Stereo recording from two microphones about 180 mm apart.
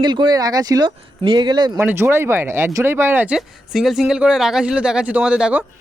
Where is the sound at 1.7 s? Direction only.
15° right (ahead or behind).